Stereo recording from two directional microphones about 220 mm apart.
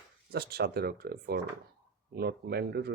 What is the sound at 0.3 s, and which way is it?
Speech, 45° right (ahead or behind).